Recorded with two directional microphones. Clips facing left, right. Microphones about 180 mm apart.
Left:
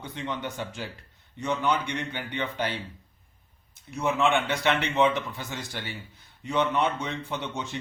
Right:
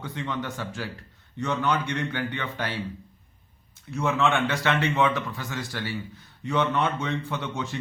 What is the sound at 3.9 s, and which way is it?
Speech, 15° left (ahead or behind).